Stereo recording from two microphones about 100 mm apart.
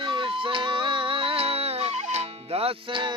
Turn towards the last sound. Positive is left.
turn(degrees=-55)  # may be behind; listen again after turning